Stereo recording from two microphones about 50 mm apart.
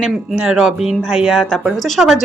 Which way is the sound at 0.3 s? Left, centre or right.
Centre.